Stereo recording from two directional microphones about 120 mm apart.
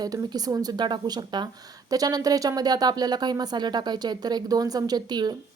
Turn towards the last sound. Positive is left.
turn(degrees=-35)  # may be behind; listen again after turning